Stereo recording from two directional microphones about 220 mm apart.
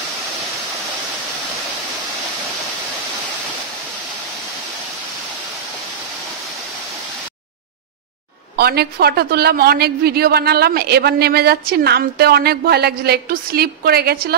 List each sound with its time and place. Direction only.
8.5 s a woman's voice: 45° right (ahead or behind)